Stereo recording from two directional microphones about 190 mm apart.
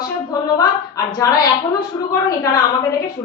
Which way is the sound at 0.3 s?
20° left (ahead or behind).